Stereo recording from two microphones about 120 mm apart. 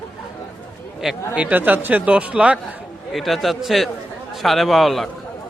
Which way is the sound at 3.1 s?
Centre (ahead or behind).